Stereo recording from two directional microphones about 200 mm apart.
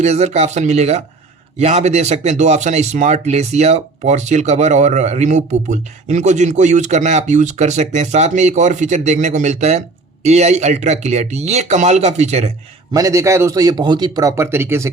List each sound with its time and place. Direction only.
0.0 s speech: 35° right (ahead or behind)
12.9 s a man's voice: 20° right (ahead or behind)